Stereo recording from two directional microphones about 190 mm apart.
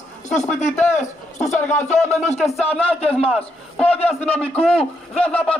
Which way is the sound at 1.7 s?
40° left (ahead or behind).